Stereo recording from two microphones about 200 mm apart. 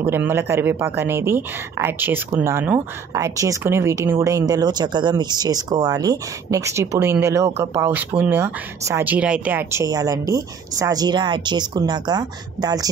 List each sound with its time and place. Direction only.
0.0 s speech: 10° right (ahead or behind)